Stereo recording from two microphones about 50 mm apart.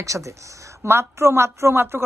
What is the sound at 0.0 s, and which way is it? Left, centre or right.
Speech, right.